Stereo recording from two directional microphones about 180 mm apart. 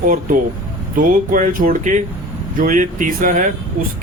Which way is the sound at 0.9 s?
50° right (ahead or behind).